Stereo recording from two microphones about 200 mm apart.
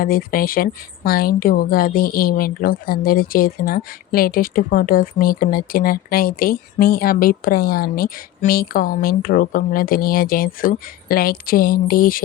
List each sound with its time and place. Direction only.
0.0 s a woman's voice: 45° left (ahead or behind)